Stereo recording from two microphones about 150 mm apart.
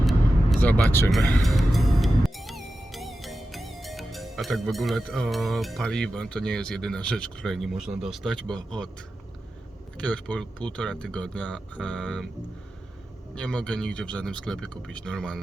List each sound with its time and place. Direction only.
0.0 s vehicle: centre (ahead or behind)
0.9 s speech: 15° left (ahead or behind)
1.1 s speech: centre (ahead or behind)
10.0 s speech: 10° left (ahead or behind)
13.3 s speech: 5° left (ahead or behind)